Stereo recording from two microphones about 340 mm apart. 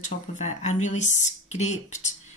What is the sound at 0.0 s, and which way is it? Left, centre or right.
Speech, left.